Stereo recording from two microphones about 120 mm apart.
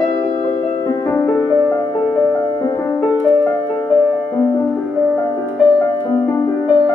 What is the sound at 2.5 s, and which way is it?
Music, 30° left (ahead or behind).